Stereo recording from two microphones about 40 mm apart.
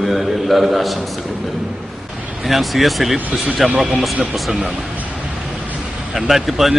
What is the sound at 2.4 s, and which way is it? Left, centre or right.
Speech, centre.